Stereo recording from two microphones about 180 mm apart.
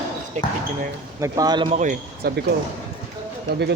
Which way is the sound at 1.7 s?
40° right (ahead or behind).